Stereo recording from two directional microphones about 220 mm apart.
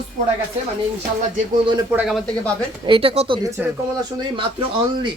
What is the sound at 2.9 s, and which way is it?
Speech, 25° right (ahead or behind).